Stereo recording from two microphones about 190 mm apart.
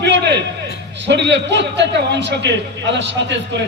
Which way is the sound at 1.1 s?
65° right (ahead or behind).